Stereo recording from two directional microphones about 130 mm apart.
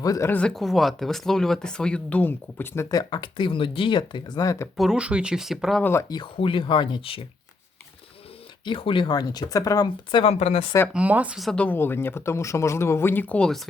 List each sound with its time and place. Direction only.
0.0 s speech: 25° left (ahead or behind)
0.3 s speech: 10° left (ahead or behind)
2.9 s speech: 30° left (ahead or behind)
4.8 s speech: 5° right (ahead or behind)
5.8 s speech: 20° left (ahead or behind)
6.1 s speech: 45° left (ahead or behind)
8.6 s speech: 40° left (ahead or behind)
10.3 s speech: 55° left (ahead or behind)
10.9 s speech: 10° right (ahead or behind)